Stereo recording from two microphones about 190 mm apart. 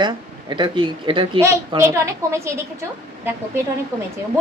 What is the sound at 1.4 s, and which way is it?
A woman's voice, 15° right (ahead or behind).